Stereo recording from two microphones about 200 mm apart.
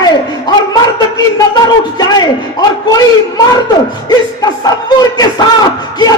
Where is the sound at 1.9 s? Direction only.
20° left (ahead or behind).